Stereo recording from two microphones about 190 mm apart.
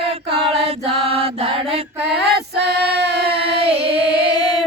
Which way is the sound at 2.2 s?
60° right (ahead or behind).